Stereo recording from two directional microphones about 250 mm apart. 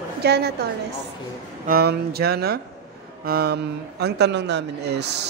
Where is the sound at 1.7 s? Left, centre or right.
Right.